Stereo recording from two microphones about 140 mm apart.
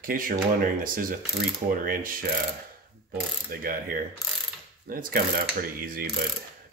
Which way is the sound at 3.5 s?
90° right.